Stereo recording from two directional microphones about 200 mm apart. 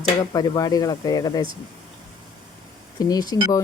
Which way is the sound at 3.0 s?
20° left (ahead or behind).